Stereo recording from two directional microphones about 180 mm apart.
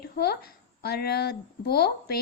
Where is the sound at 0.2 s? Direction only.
60° left (ahead or behind).